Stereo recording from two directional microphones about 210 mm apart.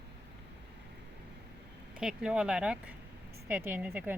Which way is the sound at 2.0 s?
5° right (ahead or behind).